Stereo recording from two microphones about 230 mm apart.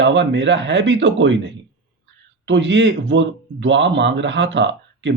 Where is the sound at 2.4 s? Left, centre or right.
Right.